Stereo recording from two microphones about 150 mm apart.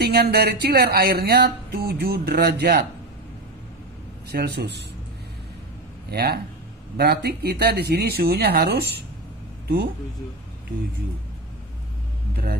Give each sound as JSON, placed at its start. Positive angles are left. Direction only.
{"t": 0.0, "sound": "speech", "side_deg": -90}
{"t": 4.3, "sound": "speech", "side_deg": -90}
{"t": 6.0, "sound": "speech", "side_deg": -90}